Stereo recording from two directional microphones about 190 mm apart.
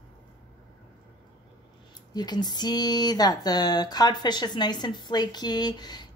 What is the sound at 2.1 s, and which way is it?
Speech, 20° left (ahead or behind).